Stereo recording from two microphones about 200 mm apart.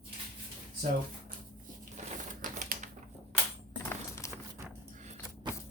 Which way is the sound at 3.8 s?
10° left (ahead or behind).